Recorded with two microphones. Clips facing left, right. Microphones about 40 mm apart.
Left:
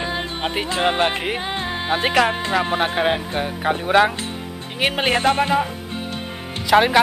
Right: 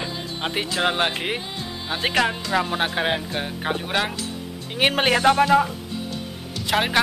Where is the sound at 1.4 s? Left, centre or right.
Left.